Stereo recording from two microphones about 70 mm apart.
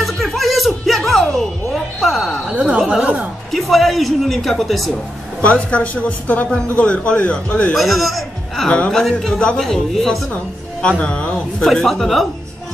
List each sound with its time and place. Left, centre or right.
0.0 s music: centre
2.4 s a woman's voice: centre
3.5 s a woman's voice: centre
5.4 s a woman's voice: centre
7.7 s a man's voice: centre
8.6 s a woman's voice: centre
9.6 s a woman's voice: centre
10.3 s a woman's voice: centre